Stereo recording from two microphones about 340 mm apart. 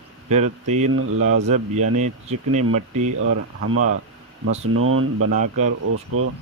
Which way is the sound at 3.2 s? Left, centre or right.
Right.